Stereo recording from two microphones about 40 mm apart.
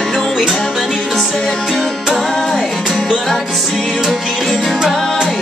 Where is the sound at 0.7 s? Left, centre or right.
Centre.